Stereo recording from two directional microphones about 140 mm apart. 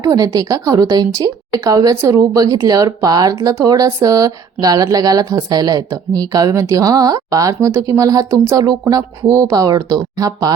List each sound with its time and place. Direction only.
0.0 s a woman's voice: 25° right (ahead or behind)